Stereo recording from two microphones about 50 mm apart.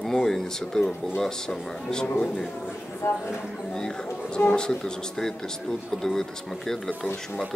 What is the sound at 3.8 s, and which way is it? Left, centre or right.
Speech, centre.